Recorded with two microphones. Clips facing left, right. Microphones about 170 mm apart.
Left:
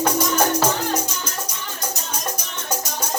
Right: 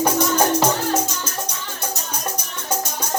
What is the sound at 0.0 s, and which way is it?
Music, 10° right (ahead or behind).